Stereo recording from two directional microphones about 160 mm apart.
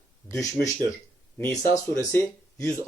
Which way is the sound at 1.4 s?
20° left (ahead or behind).